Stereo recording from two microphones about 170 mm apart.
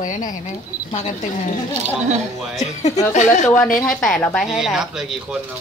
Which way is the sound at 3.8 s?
Centre (ahead or behind).